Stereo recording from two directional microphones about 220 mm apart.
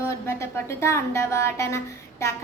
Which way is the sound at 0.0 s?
10° left (ahead or behind).